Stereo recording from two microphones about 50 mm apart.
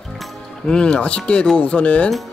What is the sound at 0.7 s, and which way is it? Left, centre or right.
Speech, centre.